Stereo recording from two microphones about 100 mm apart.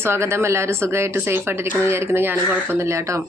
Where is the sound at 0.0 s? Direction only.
25° right (ahead or behind).